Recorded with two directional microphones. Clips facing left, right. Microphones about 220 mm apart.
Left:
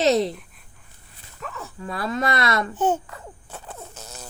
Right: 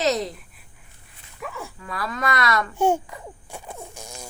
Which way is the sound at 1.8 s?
25° left (ahead or behind).